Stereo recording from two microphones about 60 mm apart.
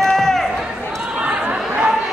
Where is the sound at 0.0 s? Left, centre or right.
Centre.